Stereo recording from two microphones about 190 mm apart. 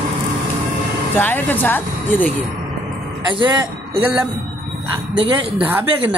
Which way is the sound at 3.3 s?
25° right (ahead or behind).